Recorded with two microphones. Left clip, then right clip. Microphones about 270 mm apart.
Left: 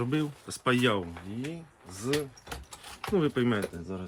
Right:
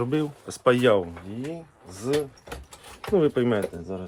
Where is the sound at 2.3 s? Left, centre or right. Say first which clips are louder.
Right 2 dB; centre.